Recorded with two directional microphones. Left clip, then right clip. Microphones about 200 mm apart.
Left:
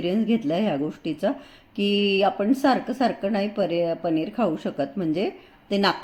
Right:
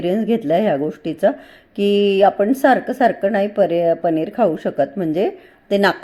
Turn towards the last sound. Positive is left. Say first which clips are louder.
# right 7 dB
turn(degrees=-20)  # may be behind; listen again after turning